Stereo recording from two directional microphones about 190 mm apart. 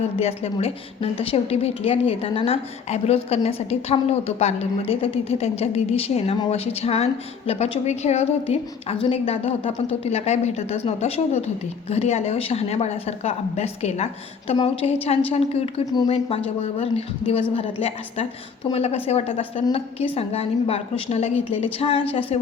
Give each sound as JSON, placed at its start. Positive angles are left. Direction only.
{"t": 0.2, "sound": "a woman's voice", "side_deg": 35}